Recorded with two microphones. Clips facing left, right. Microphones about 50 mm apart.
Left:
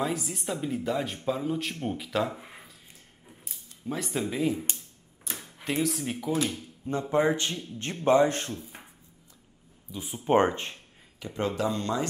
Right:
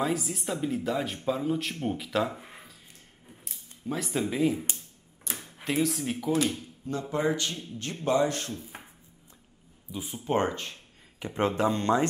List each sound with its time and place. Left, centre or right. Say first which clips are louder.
0.0 s speech: right 1 dB; centre
3.3 s a sound: even; centre
5.3 s speech: right 1 dB; centre
6.9 s a man's voice: left 3 dB; left
9.8 s speech: right 1 dB; centre
10.2 s speech: left 5 dB; left
11.1 s speech: right 3 dB; right